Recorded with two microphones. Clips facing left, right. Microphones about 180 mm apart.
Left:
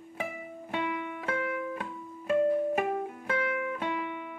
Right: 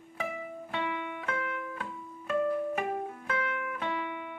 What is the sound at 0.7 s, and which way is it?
Music, 40° left (ahead or behind).